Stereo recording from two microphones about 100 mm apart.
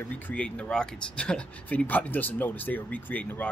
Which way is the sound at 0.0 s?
10° left (ahead or behind).